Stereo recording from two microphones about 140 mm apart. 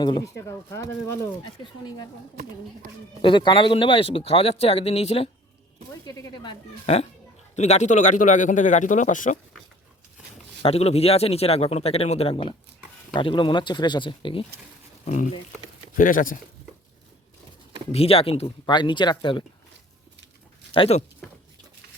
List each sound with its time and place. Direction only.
0.0 s speech: 30° left (ahead or behind)
3.2 s speech: 35° left (ahead or behind)
6.1 s speech: 25° left (ahead or behind)
6.8 s a man's voice: 45° left (ahead or behind); by 9.4 s 65° left (ahead or behind)
10.6 s speech: 45° left (ahead or behind)
15.0 s a man's voice: 60° left (ahead or behind)
16.0 s speech: 75° left (ahead or behind)
17.9 s speech: 45° left (ahead or behind)
20.7 s speech: 45° left (ahead or behind)